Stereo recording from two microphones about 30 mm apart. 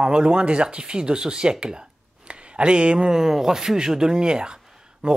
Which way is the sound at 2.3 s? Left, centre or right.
Right.